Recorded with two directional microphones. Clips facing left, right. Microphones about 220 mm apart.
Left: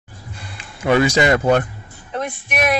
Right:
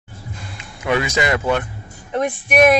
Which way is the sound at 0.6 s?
35° left (ahead or behind).